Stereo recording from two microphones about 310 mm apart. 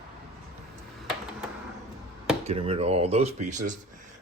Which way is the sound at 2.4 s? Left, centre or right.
Centre.